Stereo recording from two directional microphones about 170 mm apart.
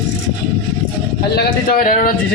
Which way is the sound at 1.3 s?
60° left (ahead or behind).